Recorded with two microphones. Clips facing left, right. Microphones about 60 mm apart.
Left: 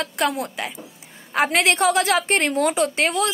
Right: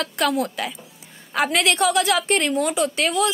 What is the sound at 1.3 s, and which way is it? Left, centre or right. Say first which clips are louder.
A woman's voice: left 1 dB; left.